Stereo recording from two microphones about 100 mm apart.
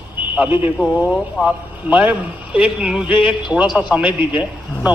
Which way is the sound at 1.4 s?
10° right (ahead or behind).